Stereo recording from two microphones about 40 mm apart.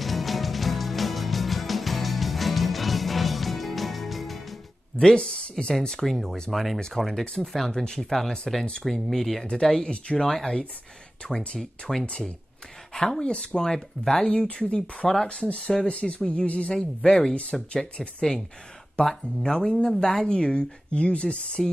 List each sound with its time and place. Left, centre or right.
0.0 s music: centre
4.9 s speech: left
5.8 s speech: centre
8.5 s speech: centre
9.5 s speech: centre
12.9 s speech: centre
13.2 s speech: left
18.9 s speech: centre